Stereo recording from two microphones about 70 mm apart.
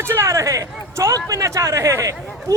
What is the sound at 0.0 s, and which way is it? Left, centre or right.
A man's voice, right.